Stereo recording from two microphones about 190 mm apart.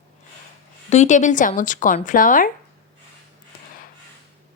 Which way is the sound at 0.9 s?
40° left (ahead or behind).